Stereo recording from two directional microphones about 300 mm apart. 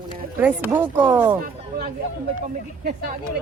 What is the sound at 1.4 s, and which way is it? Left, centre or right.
Speech, right.